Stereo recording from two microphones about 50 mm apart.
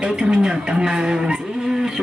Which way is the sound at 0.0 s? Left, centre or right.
Centre.